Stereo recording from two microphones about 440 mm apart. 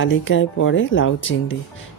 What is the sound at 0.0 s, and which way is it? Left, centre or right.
Speech, left.